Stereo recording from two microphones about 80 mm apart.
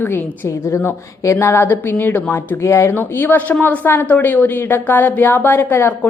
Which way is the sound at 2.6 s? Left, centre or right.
Left.